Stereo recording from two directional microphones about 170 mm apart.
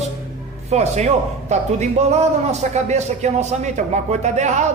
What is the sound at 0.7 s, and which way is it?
Speech, 40° right (ahead or behind).